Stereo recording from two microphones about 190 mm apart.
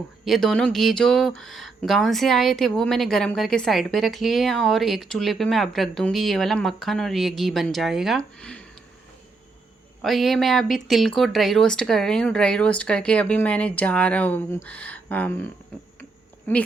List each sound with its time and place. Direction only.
0.3 s speech: centre (ahead or behind)
10.0 s speech: centre (ahead or behind)
16.5 s speech: 10° left (ahead or behind)